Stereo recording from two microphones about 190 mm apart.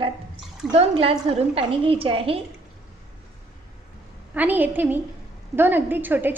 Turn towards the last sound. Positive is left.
turn(degrees=-10)  # may be behind; listen again after turning